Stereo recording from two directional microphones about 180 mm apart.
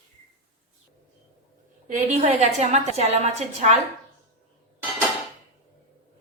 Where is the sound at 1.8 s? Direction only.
40° right (ahead or behind).